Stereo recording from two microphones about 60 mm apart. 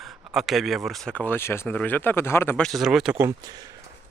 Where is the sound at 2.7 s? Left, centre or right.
Centre.